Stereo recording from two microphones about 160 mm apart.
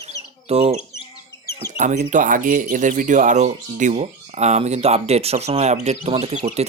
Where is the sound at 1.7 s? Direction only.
55° right (ahead or behind).